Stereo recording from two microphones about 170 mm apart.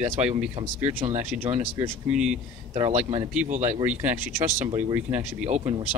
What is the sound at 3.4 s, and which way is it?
Speech, 45° right (ahead or behind).